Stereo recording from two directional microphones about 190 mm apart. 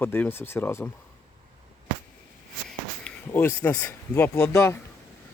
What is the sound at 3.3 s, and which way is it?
Speech, 10° left (ahead or behind).